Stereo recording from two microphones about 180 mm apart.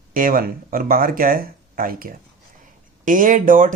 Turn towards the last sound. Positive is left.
turn(degrees=-50)  # may be behind; listen again after turning